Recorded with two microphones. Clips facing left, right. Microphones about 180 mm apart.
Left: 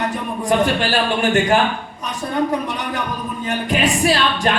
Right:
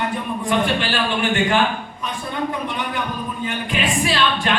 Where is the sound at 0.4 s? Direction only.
40° left (ahead or behind).